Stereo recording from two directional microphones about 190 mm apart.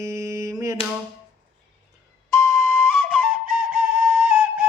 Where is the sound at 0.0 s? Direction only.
15° right (ahead or behind).